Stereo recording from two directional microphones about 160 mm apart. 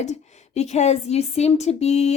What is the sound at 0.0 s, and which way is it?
Speech, 45° left (ahead or behind).